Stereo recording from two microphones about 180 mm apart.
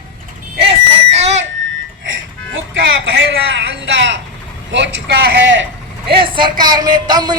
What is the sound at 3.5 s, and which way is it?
A man's voice, 90° right.